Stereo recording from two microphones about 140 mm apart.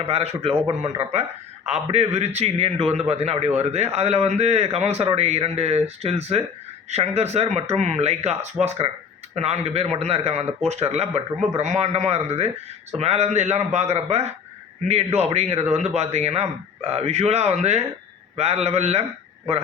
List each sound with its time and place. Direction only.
0.0 s a man's voice: 50° right (ahead or behind)